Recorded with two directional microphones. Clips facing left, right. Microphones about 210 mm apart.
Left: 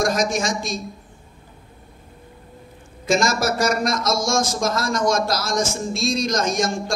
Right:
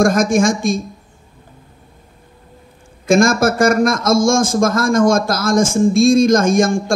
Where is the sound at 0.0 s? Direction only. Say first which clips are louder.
Right 8 dB; 50° right (ahead or behind).